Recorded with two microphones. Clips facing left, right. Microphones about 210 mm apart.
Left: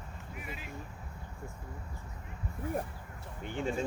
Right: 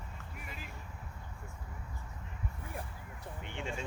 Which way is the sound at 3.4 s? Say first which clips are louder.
Left 8 dB; 40° left (ahead or behind).